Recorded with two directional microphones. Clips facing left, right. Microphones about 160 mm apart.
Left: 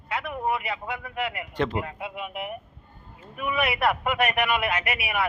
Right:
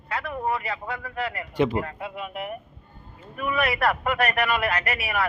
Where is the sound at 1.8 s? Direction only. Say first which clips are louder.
Right 1 dB; 5° left (ahead or behind).